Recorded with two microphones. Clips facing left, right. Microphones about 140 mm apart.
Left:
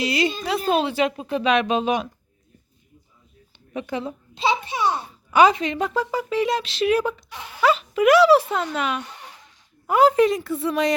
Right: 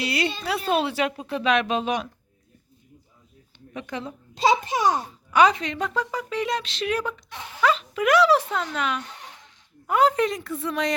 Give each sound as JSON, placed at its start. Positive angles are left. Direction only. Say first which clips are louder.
{"t": 0.7, "sound": "a woman's voice", "louder": "left 3 dB", "side_deg": 0}
{"t": 3.7, "sound": "speech", "louder": "left 5 dB", "side_deg": 10}
{"t": 4.4, "sound": "a child's voice", "louder": "right 2 dB", "side_deg": -40}
{"t": 5.3, "sound": "a woman's voice", "louder": "left 3 dB", "side_deg": 5}